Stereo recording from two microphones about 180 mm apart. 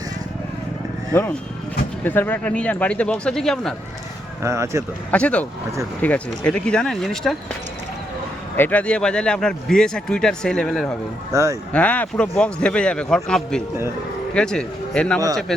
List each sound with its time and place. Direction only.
1.1 s speech: 10° left (ahead or behind)
4.4 s speech: 15° right (ahead or behind)
5.1 s speech: 5° left (ahead or behind)
8.5 s speech: 10° left (ahead or behind)
11.3 s speech: 15° right (ahead or behind)
11.7 s speech: 5° left (ahead or behind)